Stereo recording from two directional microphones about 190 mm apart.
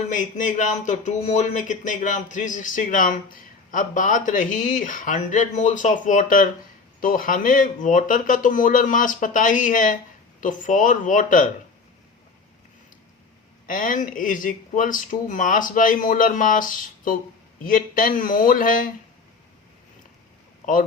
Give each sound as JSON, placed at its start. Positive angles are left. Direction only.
{"t": 0.1, "sound": "speech", "side_deg": 40}
{"t": 13.7, "sound": "speech", "side_deg": 45}